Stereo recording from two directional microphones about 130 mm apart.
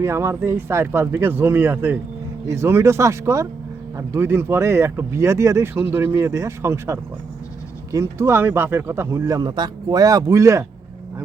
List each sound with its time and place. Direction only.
0.0 s speech: 20° right (ahead or behind)